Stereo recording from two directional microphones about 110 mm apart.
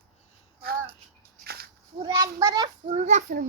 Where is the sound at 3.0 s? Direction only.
90° right.